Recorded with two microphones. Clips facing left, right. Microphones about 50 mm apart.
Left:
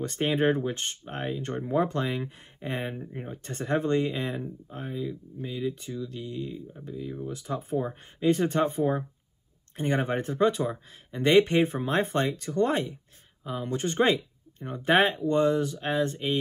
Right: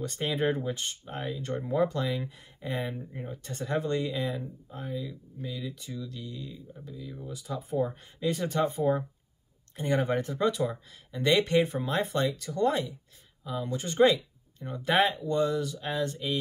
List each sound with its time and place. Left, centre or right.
0.0 s speech: left